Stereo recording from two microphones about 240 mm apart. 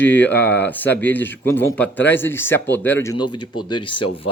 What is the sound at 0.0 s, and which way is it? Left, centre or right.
Speech, centre.